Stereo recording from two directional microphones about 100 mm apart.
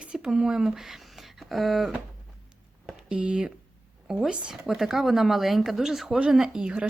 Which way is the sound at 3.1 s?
10° right (ahead or behind).